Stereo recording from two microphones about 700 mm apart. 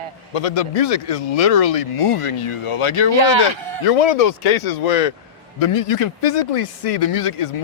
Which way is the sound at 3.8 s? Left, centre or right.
Left.